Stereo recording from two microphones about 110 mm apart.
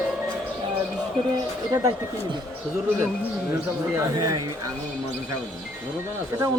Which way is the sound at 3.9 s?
25° right (ahead or behind).